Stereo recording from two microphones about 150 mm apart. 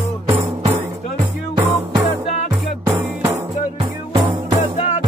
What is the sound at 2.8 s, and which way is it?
Music, 20° right (ahead or behind).